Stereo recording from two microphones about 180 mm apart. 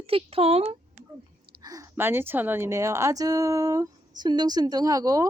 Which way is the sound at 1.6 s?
20° right (ahead or behind).